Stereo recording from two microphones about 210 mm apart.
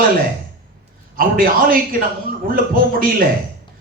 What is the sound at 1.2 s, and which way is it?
A man's voice, 45° right (ahead or behind).